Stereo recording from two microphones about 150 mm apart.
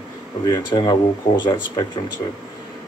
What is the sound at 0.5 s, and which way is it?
Speech, 30° left (ahead or behind).